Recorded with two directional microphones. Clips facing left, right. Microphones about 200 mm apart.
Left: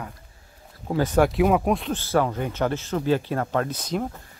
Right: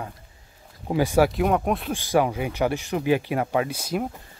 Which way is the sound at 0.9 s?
10° right (ahead or behind).